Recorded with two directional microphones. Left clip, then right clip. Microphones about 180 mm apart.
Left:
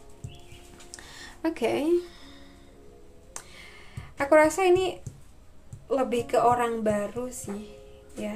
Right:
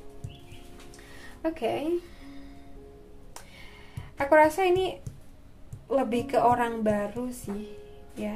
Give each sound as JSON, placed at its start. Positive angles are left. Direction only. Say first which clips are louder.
{"t": 1.4, "sound": "a woman's voice", "louder": "left 2 dB", "side_deg": 20}
{"t": 3.3, "sound": "a sound", "louder": "left 3 dB", "side_deg": 5}
{"t": 5.9, "sound": "speech", "louder": "left 1 dB", "side_deg": 0}